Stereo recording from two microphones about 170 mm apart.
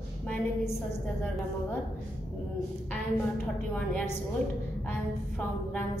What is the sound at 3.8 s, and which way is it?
A man's voice, 10° left (ahead or behind).